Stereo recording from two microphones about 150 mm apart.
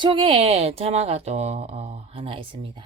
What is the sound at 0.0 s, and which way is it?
Speech, 35° right (ahead or behind).